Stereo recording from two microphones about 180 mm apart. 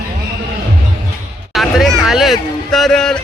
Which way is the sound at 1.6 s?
Centre (ahead or behind).